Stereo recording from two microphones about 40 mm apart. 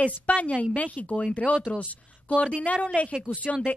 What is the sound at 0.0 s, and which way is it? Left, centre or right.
A woman's voice, left.